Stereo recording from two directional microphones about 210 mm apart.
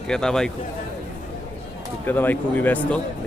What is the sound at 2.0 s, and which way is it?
Speech, 10° left (ahead or behind).